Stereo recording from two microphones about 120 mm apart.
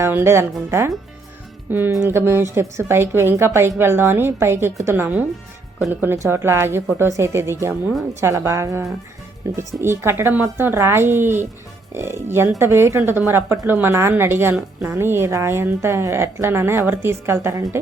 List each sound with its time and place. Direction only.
0.0 s a woman's voice: 20° right (ahead or behind)